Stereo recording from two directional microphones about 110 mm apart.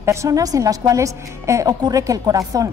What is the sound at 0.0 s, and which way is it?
A woman's voice, 25° right (ahead or behind).